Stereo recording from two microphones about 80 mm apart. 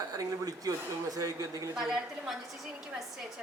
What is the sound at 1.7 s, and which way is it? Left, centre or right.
Speech, centre.